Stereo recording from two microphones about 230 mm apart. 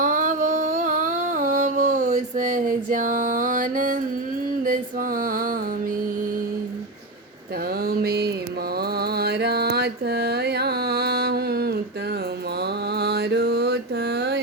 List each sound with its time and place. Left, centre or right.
0.0 s music: right
7.9 s a sound: right
8.8 s mantra: right
12.9 s mantra: right